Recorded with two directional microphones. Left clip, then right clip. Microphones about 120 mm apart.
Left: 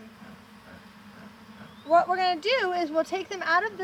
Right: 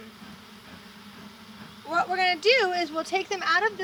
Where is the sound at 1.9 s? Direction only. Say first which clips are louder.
Left 2 dB; 45° left (ahead or behind).